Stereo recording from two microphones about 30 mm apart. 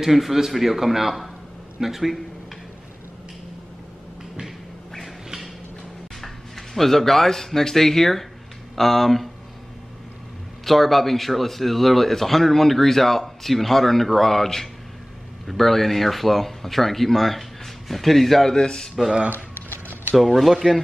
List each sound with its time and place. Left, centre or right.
0.0 s a man's voice: centre
6.2 s speech: centre
10.6 s speech: centre
18.5 s speech: left
20.2 s speech: centre